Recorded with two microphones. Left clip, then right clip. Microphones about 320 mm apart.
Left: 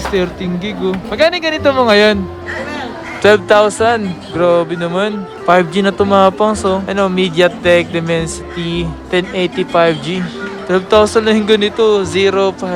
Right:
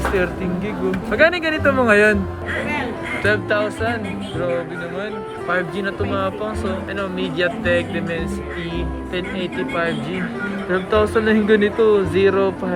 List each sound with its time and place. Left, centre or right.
1.1 s speech: centre
3.2 s speech: centre